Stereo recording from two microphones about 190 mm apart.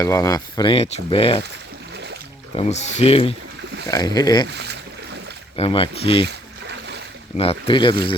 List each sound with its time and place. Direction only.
0.0 s speech: 15° left (ahead or behind)
2.6 s speech: 35° left (ahead or behind)
3.8 s speech: 20° left (ahead or behind)
4.4 s speech: 60° right (ahead or behind)
5.5 s speech: 30° left (ahead or behind)
6.2 s boat: 60° right (ahead or behind)
7.3 s speech: 30° left (ahead or behind)